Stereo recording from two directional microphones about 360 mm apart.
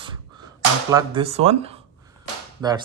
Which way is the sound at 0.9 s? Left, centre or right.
Centre.